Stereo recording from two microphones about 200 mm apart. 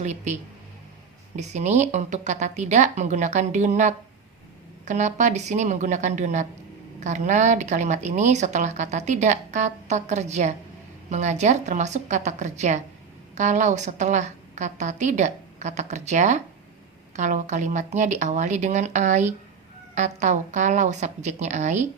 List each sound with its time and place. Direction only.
0.0 s a woman's voice: 35° right (ahead or behind)
1.4 s a woman's voice: 35° right (ahead or behind)